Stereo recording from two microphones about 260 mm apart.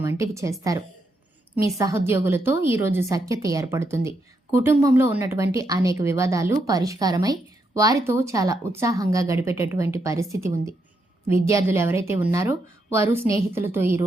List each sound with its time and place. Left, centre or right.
0.0 s a woman's voice: centre
1.5 s a woman's voice: centre